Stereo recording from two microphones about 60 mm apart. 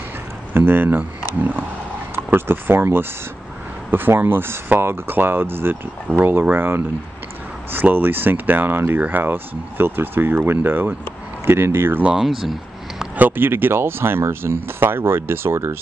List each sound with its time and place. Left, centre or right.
0.6 s speech: right
12.0 s speech: centre
12.3 s speech: centre
13.2 s speech: right